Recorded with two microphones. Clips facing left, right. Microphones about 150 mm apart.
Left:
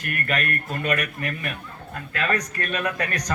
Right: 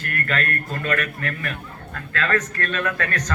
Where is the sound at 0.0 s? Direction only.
20° left (ahead or behind).